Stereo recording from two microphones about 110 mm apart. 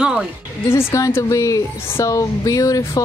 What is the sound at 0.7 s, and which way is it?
A woman's voice, 25° left (ahead or behind).